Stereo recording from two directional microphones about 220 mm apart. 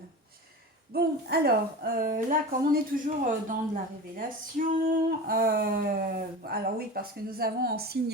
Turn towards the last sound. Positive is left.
turn(degrees=-45)  # may be behind; listen again after turning